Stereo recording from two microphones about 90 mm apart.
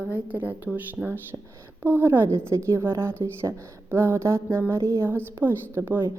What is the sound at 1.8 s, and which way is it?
A woman's voice, 25° right (ahead or behind).